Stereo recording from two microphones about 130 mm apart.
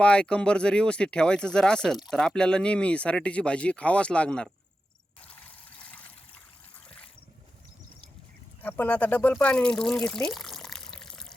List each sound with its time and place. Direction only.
0.0 s speech: 10° left (ahead or behind)
5.8 s water: 10° left (ahead or behind)
8.6 s speech: 15° left (ahead or behind)